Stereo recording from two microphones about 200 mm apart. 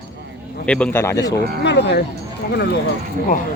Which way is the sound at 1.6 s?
55° left (ahead or behind).